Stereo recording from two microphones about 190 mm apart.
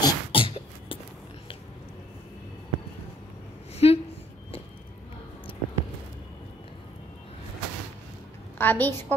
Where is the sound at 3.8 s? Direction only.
30° left (ahead or behind).